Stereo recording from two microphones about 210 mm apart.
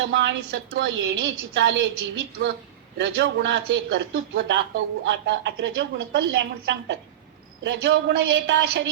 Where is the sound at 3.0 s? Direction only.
55° right (ahead or behind).